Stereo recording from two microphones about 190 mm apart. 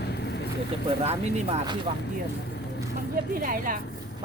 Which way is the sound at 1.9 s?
35° right (ahead or behind).